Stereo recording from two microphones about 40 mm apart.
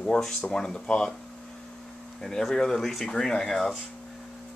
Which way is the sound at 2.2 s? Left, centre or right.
Centre.